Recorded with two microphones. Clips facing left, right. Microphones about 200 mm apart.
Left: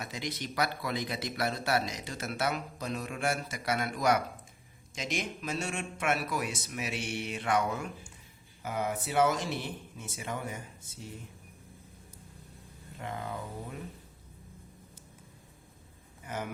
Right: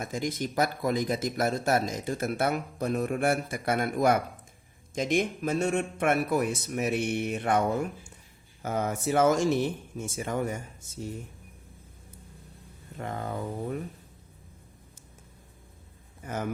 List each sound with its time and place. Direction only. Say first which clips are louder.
0.0 s speech: right 7 dB; 50° right (ahead or behind)
8.6 s speech: right 5 dB; 45° right (ahead or behind)
13.0 s speech: right 5 dB; 45° right (ahead or behind)
16.2 s speech: right 4 dB; 45° right (ahead or behind)